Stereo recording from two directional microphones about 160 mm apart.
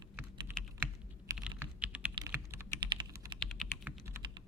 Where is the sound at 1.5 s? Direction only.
10° right (ahead or behind).